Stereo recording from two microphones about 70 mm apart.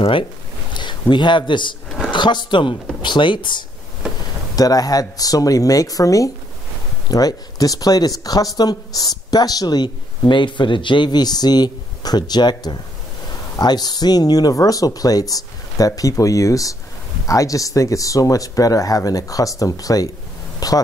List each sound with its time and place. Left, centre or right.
0.7 s speech: left
4.6 s a woman's voice: left
11.1 s speech: left
13.3 s speech: left